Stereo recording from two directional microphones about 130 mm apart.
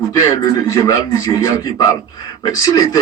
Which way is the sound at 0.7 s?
25° left (ahead or behind).